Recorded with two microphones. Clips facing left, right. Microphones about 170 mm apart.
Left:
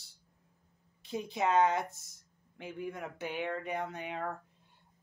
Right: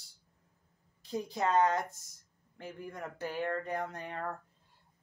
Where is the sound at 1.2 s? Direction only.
20° left (ahead or behind).